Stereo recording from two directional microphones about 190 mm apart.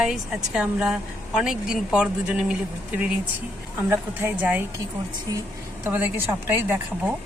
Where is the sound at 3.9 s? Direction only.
10° right (ahead or behind).